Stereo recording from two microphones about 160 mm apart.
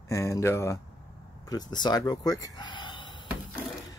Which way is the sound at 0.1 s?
20° left (ahead or behind).